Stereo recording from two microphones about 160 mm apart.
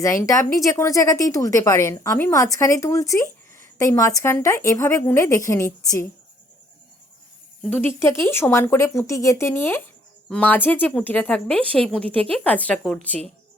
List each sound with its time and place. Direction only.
0.0 s speech: 20° left (ahead or behind)
7.6 s speech: 10° left (ahead or behind)